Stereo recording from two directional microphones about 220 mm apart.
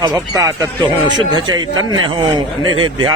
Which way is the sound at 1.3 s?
20° right (ahead or behind).